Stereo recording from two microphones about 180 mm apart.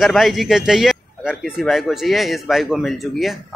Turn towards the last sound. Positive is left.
turn(degrees=0)  # may be behind; listen again after turning